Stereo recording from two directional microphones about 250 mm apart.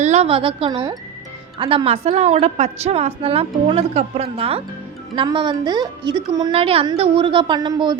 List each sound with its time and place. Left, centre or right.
0.0 s a woman's voice: right